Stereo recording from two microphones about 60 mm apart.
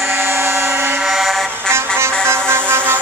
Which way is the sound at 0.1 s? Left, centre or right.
Right.